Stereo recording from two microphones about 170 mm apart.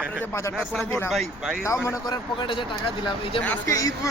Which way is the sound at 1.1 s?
Centre (ahead or behind).